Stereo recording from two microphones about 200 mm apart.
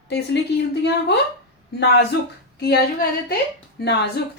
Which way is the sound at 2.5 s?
50° left (ahead or behind).